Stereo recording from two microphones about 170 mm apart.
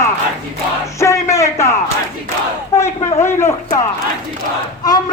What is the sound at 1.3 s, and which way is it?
A man's voice, 15° left (ahead or behind).